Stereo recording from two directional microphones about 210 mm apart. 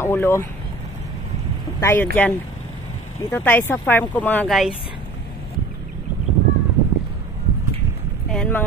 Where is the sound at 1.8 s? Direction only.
10° left (ahead or behind).